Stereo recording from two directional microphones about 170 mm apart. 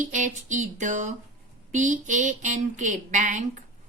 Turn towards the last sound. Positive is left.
turn(degrees=-45)  # may be behind; listen again after turning